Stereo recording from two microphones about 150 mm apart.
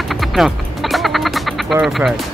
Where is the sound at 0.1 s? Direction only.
Centre (ahead or behind).